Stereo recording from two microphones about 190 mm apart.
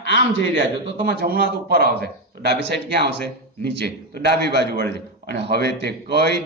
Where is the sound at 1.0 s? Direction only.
50° right (ahead or behind).